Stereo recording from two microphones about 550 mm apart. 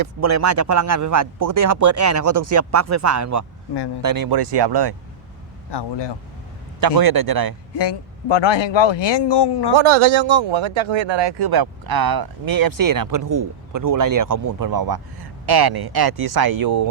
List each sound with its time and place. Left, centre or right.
0.0 s speech: right
5.7 s speech: left
6.7 s speech: right
7.8 s speech: left
9.7 s speech: right